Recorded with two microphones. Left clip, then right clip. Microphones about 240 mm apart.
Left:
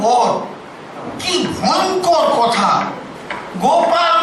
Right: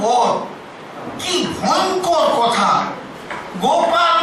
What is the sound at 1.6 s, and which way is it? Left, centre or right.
A man's voice, centre.